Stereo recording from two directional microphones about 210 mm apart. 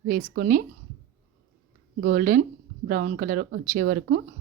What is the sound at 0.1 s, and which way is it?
Speech, 40° right (ahead or behind).